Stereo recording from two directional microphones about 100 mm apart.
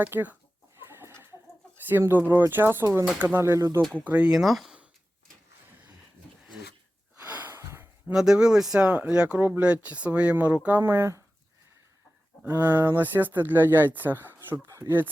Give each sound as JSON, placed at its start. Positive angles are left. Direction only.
{"t": 0.0, "sound": "speech", "side_deg": -20}
{"t": 0.9, "sound": "chicken", "side_deg": -25}
{"t": 1.9, "sound": "speech", "side_deg": -20}
{"t": 4.0, "sound": "speech", "side_deg": -15}
{"t": 4.3, "sound": "speech", "side_deg": 0}
{"t": 7.3, "sound": "a sound", "side_deg": -25}
{"t": 8.0, "sound": "speech", "side_deg": -5}
{"t": 10.8, "sound": "speech", "side_deg": -25}
{"t": 12.5, "sound": "speech", "side_deg": -20}